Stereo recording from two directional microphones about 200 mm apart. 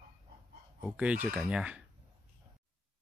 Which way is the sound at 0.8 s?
5° right (ahead or behind).